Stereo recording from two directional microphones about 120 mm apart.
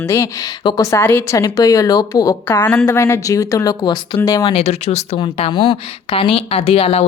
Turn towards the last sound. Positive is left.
turn(degrees=55)  # may be behind; listen again after turning